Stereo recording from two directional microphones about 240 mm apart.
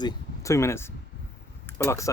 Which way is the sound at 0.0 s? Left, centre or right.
Centre.